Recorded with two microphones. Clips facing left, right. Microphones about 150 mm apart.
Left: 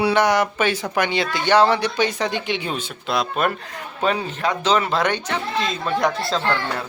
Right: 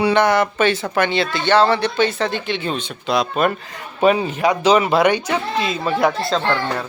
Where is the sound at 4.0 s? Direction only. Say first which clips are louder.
Right 7 dB; 15° right (ahead or behind).